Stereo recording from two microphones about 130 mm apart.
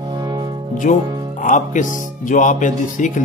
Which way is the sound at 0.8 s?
90° left.